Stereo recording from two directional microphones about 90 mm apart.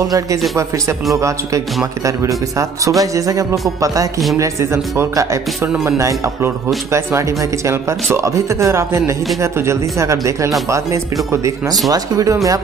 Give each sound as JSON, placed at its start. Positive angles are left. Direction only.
{"t": 0.0, "sound": "speech", "side_deg": -40}
{"t": 11.9, "sound": "speech", "side_deg": -40}